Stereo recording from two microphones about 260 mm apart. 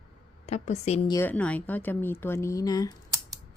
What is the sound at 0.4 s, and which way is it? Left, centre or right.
Speech, left.